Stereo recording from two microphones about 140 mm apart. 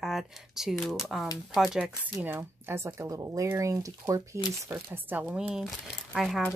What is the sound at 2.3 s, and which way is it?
Speech, 15° right (ahead or behind).